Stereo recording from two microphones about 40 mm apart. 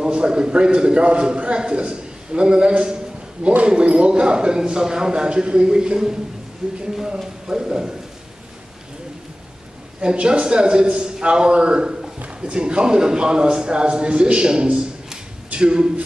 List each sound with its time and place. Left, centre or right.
0.0 s a man's voice: right
6.6 s a man's voice: right
9.9 s a man's voice: right